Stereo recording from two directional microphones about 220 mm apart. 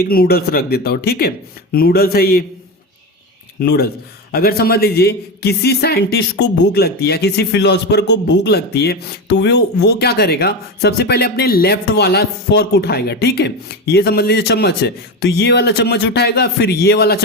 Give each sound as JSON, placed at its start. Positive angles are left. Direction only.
{"t": 0.0, "sound": "a man's voice", "side_deg": 45}
{"t": 3.6, "sound": "a man's voice", "side_deg": 45}